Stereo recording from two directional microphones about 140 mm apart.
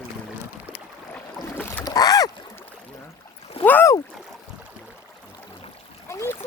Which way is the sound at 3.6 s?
15° left (ahead or behind).